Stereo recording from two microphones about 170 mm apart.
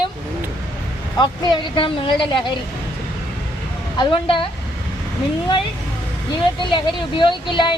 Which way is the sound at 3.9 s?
30° left (ahead or behind).